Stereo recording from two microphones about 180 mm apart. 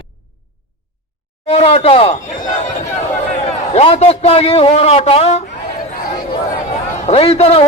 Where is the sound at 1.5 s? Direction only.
35° left (ahead or behind).